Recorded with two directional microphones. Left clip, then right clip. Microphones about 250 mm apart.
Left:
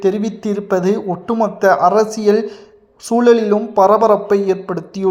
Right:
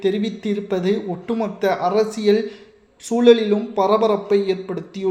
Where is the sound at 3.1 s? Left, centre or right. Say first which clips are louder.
Left 2 dB; centre.